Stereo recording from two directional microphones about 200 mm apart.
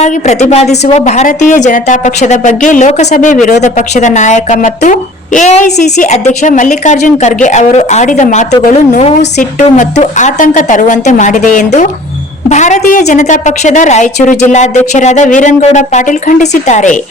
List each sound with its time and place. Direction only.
0.0 s speech: 35° left (ahead or behind)